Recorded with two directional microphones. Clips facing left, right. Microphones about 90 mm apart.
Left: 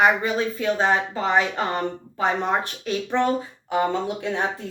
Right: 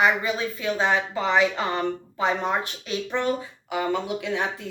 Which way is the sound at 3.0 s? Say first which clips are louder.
Left 4 dB; 35° left (ahead or behind).